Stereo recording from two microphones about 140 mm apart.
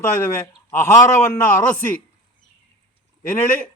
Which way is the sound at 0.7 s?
15° left (ahead or behind).